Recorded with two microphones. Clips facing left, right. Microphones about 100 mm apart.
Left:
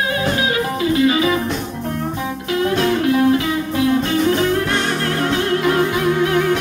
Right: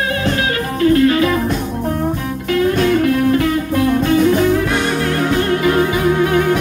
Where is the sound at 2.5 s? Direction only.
Centre (ahead or behind).